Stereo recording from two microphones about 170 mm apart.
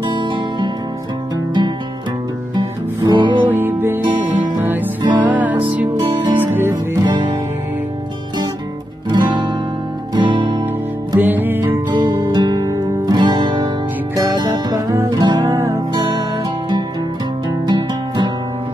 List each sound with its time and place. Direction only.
0.1 s music: 25° right (ahead or behind)
3.1 s music: 30° right (ahead or behind)
3.5 s music: 10° right (ahead or behind)
6.7 s music: 25° right (ahead or behind)
9.1 s guitar: 25° right (ahead or behind)
10.1 s music: 30° right (ahead or behind)
11.1 s music: 10° right (ahead or behind)
12.2 s music: 25° right (ahead or behind)